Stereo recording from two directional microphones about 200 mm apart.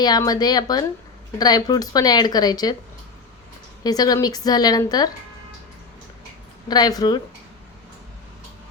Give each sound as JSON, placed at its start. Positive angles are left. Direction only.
{"t": 0.0, "sound": "speech", "side_deg": 20}
{"t": 3.8, "sound": "speech", "side_deg": 20}
{"t": 6.7, "sound": "speech", "side_deg": 20}